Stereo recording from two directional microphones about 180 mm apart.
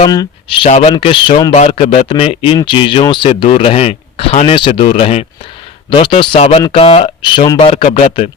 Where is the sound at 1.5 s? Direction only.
40° left (ahead or behind).